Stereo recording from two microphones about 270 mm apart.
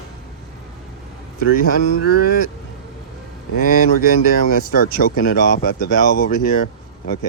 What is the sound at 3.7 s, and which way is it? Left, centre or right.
Speech, left.